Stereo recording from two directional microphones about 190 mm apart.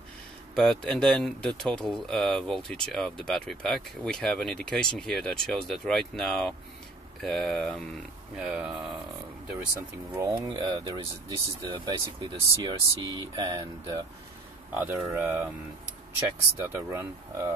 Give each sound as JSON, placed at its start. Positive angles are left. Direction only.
{"t": 0.6, "sound": "speech", "side_deg": 5}
{"t": 10.1, "sound": "speech", "side_deg": -20}
{"t": 14.7, "sound": "speech", "side_deg": -10}
{"t": 16.6, "sound": "speech", "side_deg": -10}